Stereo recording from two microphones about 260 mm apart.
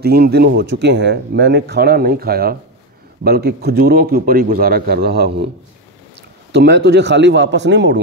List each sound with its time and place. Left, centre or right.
0.0 s speech: right
6.5 s speech: right